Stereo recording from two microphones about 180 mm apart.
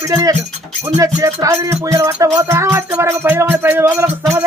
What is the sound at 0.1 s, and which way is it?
Music, 20° right (ahead or behind).